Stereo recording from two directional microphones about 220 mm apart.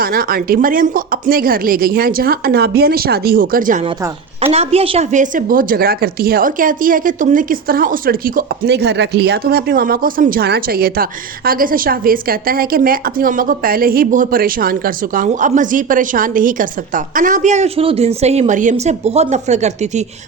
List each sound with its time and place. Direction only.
0.0 s a woman's voice: 40° right (ahead or behind)
4.5 s a woman's voice: 30° right (ahead or behind)